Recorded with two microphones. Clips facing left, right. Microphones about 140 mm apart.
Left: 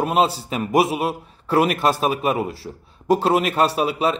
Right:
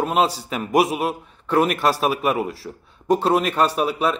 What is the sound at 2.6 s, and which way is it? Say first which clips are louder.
A man's voice: left 2 dB; 25° left (ahead or behind).